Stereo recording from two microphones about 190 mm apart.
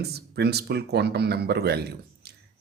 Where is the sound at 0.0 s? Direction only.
60° right (ahead or behind).